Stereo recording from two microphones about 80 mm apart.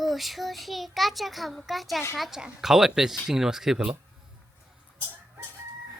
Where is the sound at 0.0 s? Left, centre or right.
Centre.